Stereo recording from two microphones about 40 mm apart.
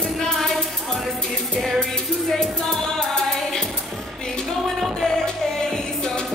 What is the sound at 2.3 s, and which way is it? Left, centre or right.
Music, centre.